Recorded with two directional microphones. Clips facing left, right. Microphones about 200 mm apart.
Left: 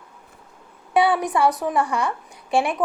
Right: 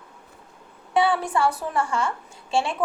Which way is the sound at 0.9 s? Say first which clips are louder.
Left 2 dB; 20° left (ahead or behind).